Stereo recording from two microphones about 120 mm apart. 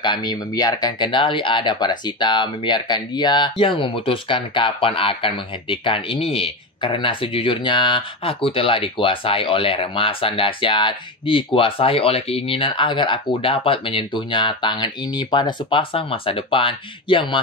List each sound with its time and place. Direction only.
0.0 s speech: 40° left (ahead or behind)